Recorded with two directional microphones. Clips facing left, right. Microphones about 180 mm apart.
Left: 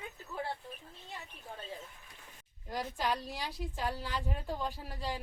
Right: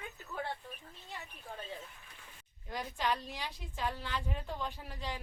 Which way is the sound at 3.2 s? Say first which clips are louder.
Left 4 dB; 40° left (ahead or behind).